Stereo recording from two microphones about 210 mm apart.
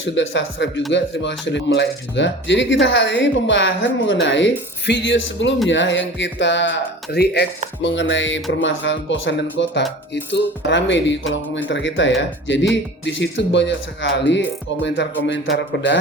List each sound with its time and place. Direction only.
0.0 s speech: 60° left (ahead or behind)